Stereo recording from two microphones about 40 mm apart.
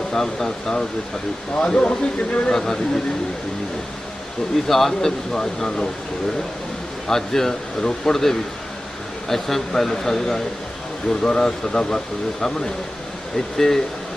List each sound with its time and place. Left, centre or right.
0.1 s speech: centre
4.7 s speech: centre
7.1 s speech: centre